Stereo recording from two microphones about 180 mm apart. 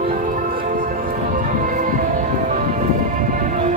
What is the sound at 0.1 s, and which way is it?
Music, 50° right (ahead or behind).